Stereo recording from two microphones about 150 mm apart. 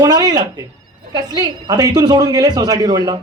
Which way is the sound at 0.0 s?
25° right (ahead or behind).